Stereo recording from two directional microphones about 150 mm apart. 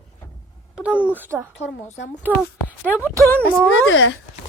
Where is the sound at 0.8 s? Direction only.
10° right (ahead or behind).